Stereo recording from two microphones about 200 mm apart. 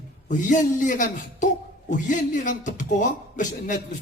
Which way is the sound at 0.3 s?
40° left (ahead or behind).